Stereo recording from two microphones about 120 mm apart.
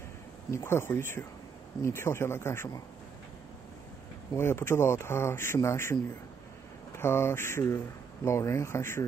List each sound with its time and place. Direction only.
0.5 s speech: 20° left (ahead or behind)
4.4 s speech: 20° left (ahead or behind)
7.0 s speech: 20° left (ahead or behind)